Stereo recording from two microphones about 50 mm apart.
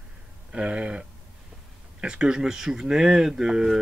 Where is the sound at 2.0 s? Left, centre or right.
Centre.